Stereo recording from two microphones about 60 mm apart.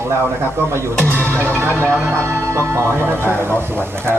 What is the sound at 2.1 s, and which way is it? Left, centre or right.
Speech, right.